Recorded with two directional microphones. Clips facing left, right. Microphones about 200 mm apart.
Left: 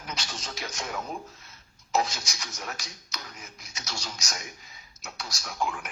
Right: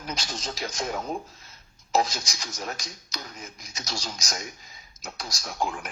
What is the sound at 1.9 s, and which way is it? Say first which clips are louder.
Speech: right 3 dB; 35° right (ahead or behind).